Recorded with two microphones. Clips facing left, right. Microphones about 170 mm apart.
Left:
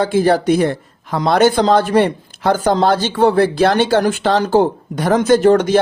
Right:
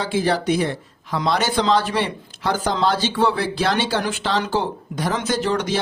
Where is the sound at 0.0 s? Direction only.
50° left (ahead or behind).